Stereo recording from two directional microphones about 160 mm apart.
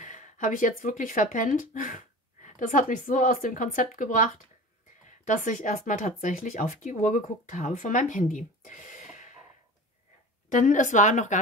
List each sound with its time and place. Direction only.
0.0 s speech: 55° left (ahead or behind)
10.5 s speech: 50° left (ahead or behind)